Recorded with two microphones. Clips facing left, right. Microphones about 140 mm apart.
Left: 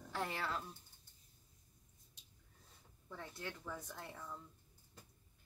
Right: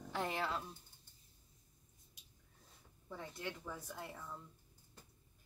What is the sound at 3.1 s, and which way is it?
Speech, 15° right (ahead or behind).